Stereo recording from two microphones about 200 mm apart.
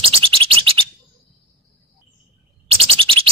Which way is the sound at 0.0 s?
30° right (ahead or behind).